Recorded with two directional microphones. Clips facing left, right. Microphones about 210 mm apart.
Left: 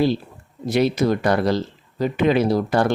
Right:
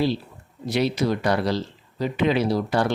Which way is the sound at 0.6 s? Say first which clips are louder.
Left 4 dB; 50° left (ahead or behind).